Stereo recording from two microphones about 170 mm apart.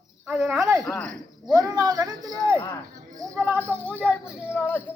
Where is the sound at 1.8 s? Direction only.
20° right (ahead or behind).